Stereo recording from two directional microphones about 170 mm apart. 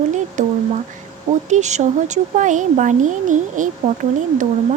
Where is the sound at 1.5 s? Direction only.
45° right (ahead or behind).